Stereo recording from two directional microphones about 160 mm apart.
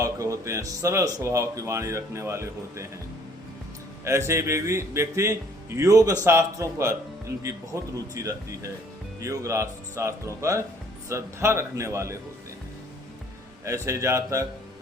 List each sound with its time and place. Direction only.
0.0 s speech: 20° right (ahead or behind)
4.0 s a man's voice: 15° right (ahead or behind)
13.7 s speech: 20° right (ahead or behind)